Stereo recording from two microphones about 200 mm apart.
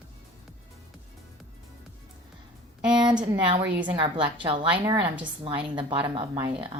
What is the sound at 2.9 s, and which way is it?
A woman's voice, 20° right (ahead or behind).